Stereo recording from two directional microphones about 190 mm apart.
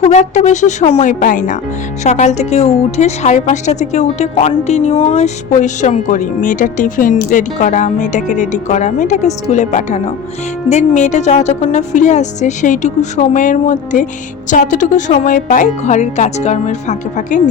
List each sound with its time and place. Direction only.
0.0 s speech: 40° left (ahead or behind)